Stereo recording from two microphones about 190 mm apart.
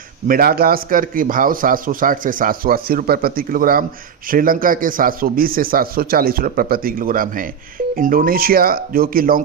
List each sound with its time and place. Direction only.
0.3 s a man's voice: 50° right (ahead or behind)